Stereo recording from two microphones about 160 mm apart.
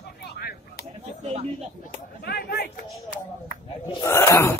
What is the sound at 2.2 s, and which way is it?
Speech, 85° left.